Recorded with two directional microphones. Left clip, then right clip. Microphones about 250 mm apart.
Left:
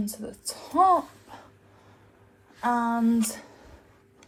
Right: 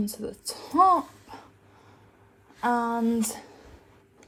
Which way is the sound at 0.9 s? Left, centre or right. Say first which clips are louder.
Left 1 dB; right.